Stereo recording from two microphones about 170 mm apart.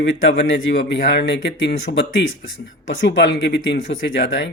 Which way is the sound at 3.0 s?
90° left.